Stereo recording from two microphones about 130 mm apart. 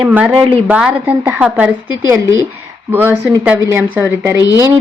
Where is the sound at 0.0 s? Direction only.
10° right (ahead or behind).